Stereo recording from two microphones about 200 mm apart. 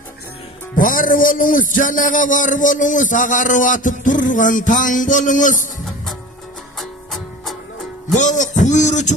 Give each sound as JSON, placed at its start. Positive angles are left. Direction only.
{"t": 0.8, "sound": "a man's voice", "side_deg": 45}
{"t": 6.7, "sound": "music", "side_deg": 0}
{"t": 8.1, "sound": "music", "side_deg": 40}